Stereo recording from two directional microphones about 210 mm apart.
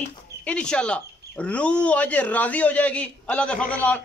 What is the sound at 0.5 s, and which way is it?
A man's voice, 5° left (ahead or behind).